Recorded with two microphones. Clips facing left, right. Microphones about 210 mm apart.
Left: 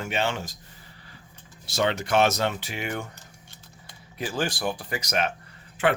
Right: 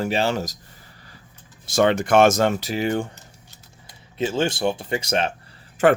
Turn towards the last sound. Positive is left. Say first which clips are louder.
# right 7 dB
turn(degrees=-40)  # may be behind; listen again after turning